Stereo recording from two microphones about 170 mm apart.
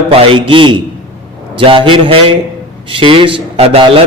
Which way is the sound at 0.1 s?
30° right (ahead or behind).